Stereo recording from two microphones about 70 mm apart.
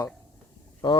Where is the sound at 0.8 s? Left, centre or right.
Left.